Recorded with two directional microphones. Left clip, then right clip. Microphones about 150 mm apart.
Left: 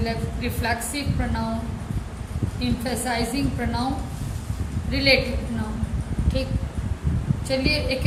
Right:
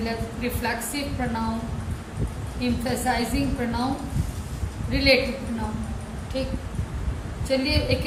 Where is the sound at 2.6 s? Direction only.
25° left (ahead or behind).